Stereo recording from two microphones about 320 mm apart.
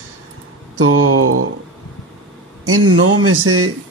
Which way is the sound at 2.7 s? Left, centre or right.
Right.